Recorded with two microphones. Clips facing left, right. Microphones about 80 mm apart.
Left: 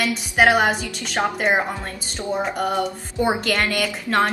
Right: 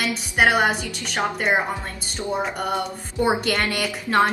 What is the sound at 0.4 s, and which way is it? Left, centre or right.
Speech, centre.